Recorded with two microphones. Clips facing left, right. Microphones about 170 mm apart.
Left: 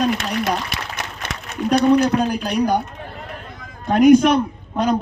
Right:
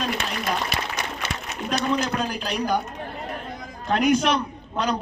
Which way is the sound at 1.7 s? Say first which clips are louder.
Left 10 dB; 55° left (ahead or behind).